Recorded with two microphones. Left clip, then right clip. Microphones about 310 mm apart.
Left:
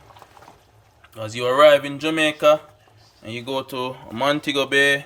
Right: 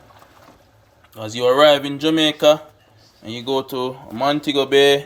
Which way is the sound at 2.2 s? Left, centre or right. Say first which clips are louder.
Right 1 dB; centre.